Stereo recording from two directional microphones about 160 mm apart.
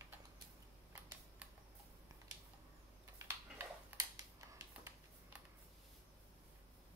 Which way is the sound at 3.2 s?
15° right (ahead or behind).